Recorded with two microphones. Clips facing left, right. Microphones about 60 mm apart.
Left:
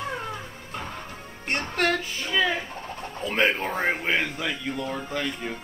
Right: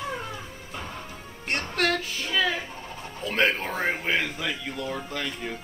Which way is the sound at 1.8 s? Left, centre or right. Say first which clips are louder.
Left 1 dB; centre.